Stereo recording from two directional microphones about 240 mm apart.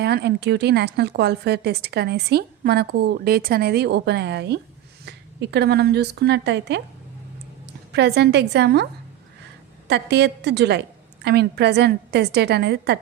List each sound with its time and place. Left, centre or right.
0.0 s a woman's voice: right
7.9 s speech: right
9.9 s speech: right